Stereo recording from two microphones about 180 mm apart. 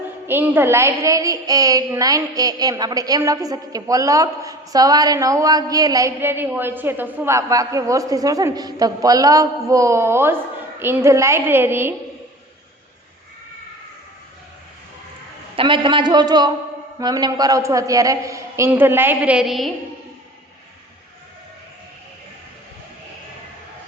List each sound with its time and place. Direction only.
0.3 s a woman's voice: 10° right (ahead or behind)
15.5 s a woman's voice: 25° right (ahead or behind); by 19.7 s centre (ahead or behind)